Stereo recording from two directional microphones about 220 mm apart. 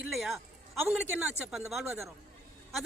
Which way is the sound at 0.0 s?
Centre (ahead or behind).